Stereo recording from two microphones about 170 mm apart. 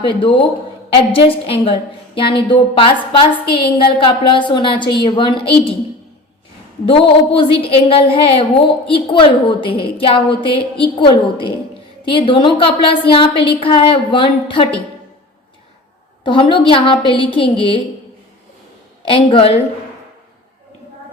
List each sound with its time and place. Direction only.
0.1 s a woman's voice: 30° left (ahead or behind)
7.3 s a woman's voice: 35° left (ahead or behind)
16.2 s a woman's voice: 30° left (ahead or behind)
19.0 s a woman's voice: 30° left (ahead or behind)